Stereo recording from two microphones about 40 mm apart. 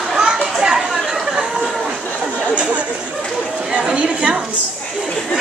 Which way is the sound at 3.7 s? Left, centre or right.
Right.